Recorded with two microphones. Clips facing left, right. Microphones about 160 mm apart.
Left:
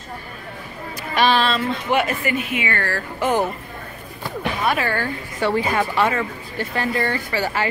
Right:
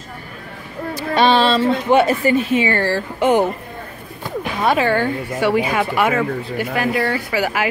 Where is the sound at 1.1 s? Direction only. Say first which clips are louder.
Right 4 dB; 25° right (ahead or behind).